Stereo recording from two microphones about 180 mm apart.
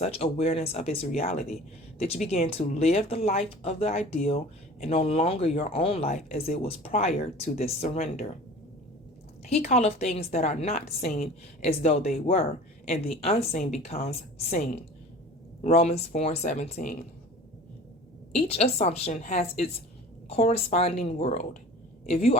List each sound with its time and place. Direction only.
0.0 s speech: 35° left (ahead or behind)
9.5 s speech: 35° left (ahead or behind)
18.3 s a woman's voice: 35° left (ahead or behind)